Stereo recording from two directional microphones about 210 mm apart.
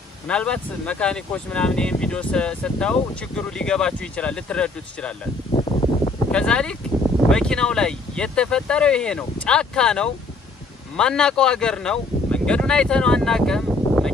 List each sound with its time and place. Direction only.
0.3 s speech: 5° left (ahead or behind)
5.5 s a sound: 25° left (ahead or behind)
6.3 s speech: 5° left (ahead or behind)